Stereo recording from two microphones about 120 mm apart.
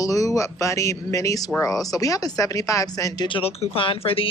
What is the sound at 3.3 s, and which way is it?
Speech, 55° left (ahead or behind).